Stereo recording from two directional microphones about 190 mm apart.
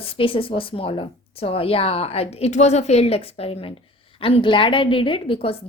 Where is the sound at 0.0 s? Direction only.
30° left (ahead or behind).